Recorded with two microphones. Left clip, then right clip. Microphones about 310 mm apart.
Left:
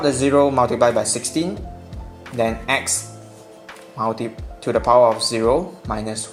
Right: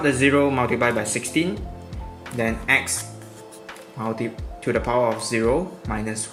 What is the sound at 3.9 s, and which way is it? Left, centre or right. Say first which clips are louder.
Speech: left 5 dB; centre.